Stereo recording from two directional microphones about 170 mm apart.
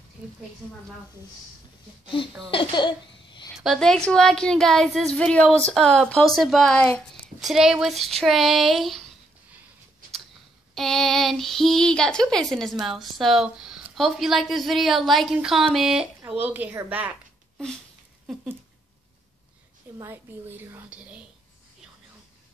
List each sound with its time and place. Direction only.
2.5 s speech: 25° left (ahead or behind)
3.5 s speech: centre (ahead or behind)
10.7 s speech: centre (ahead or behind)
18.2 s patter: 5° right (ahead or behind)
20.0 s speech: 15° right (ahead or behind)